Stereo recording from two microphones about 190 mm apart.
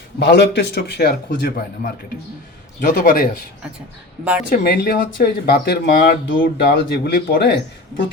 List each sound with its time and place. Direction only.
0.2 s a man's voice: 55° left (ahead or behind)
2.9 s a man's voice: 45° left (ahead or behind)
4.5 s speech: 50° left (ahead or behind)